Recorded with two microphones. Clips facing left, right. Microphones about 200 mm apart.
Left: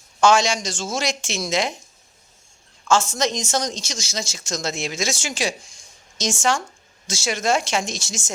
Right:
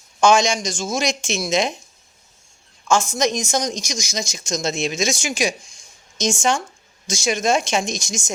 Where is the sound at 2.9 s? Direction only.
15° right (ahead or behind).